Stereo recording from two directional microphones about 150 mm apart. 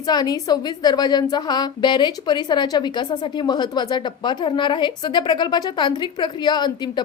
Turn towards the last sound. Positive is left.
turn(degrees=30)  # may be behind; listen again after turning